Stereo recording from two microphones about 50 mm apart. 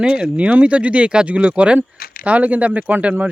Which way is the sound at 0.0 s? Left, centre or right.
Right.